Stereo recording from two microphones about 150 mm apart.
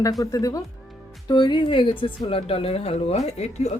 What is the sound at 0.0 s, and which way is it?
A woman's voice, 25° left (ahead or behind).